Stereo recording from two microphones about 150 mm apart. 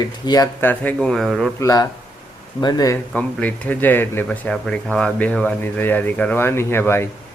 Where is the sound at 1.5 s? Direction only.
25° left (ahead or behind).